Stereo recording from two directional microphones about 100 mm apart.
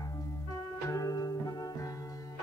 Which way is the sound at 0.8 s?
35° left (ahead or behind).